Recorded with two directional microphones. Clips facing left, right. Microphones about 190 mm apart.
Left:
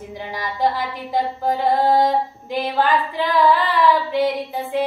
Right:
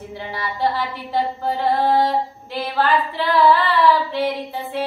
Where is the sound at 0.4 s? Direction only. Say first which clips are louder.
Left 1 dB; 15° left (ahead or behind).